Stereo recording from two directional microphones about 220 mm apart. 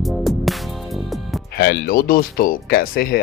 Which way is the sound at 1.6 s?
45° left (ahead or behind).